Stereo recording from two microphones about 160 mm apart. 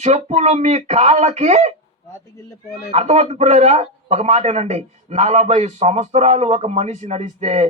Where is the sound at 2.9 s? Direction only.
40° right (ahead or behind).